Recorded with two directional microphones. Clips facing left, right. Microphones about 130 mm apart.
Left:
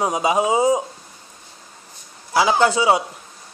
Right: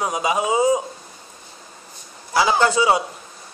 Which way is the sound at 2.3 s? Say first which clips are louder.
Left 1 dB; 15° left (ahead or behind).